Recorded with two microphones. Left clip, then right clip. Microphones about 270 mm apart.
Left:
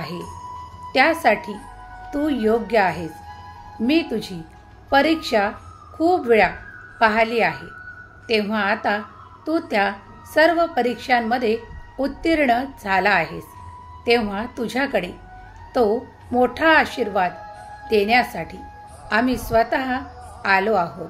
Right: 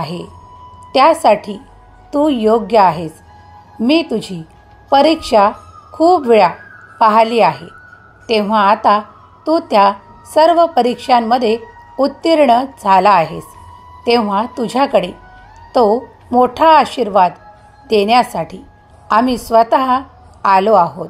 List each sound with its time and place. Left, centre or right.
0.0 s a woman's voice: right